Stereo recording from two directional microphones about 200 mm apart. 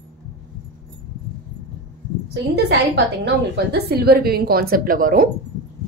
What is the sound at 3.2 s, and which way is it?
A woman's voice, 55° right (ahead or behind).